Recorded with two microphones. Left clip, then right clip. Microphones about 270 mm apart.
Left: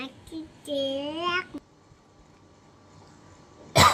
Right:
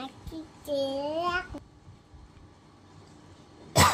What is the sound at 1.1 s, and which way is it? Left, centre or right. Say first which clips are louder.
Speech: left 1 dB; centre.